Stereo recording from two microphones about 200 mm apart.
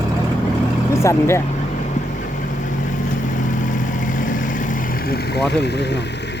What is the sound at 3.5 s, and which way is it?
Vehicle, 40° left (ahead or behind).